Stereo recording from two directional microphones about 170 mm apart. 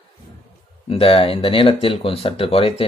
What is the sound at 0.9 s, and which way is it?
Speech, 35° left (ahead or behind).